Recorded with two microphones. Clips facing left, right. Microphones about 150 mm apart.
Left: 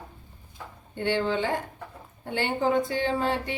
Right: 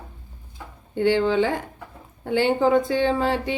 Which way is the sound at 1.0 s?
90° right.